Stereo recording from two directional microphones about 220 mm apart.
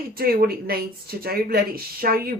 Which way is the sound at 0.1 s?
40° right (ahead or behind).